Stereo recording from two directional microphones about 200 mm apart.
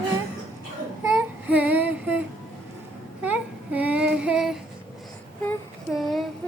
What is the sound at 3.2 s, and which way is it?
Child singing, 10° right (ahead or behind).